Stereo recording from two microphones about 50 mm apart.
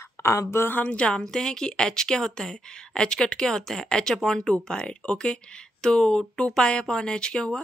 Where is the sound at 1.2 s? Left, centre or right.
Centre.